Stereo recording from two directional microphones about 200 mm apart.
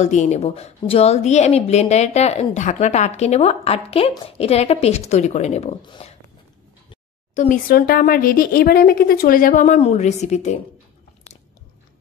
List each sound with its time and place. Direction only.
0.0 s a woman's voice: 35° left (ahead or behind)
6.9 s speech: 35° left (ahead or behind)